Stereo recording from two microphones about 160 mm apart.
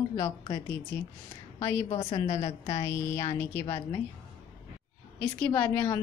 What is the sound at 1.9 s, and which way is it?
Speech, 35° left (ahead or behind).